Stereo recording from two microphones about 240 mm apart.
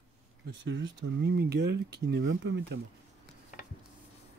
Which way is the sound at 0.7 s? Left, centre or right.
Right.